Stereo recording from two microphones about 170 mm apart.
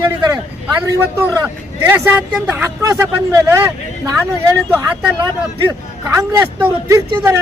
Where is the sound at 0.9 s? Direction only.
15° right (ahead or behind).